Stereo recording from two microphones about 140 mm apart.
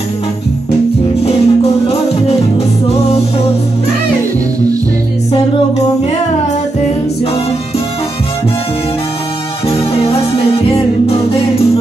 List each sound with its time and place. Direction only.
1.2 s music: 45° left (ahead or behind)
10.8 s music: 45° left (ahead or behind)